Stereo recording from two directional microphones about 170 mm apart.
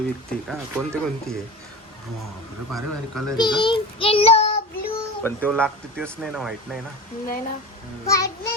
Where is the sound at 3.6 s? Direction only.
30° left (ahead or behind).